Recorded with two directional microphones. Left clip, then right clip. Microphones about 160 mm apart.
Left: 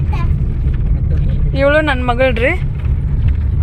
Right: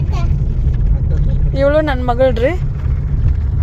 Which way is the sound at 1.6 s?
15° right (ahead or behind).